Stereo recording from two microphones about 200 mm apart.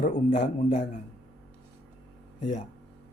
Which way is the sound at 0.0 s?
35° left (ahead or behind).